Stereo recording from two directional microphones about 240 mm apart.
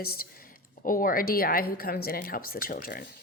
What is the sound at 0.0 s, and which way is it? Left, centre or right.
A woman's voice, left.